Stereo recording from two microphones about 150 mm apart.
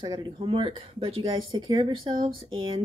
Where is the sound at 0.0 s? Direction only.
30° right (ahead or behind).